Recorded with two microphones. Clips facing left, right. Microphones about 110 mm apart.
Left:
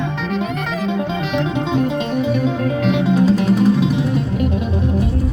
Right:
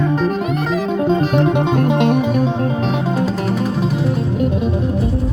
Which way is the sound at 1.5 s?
55° right (ahead or behind).